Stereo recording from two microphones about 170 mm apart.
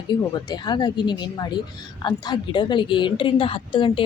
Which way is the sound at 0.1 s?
25° left (ahead or behind).